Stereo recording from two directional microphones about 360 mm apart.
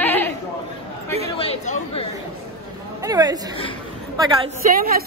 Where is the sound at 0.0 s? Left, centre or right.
Centre.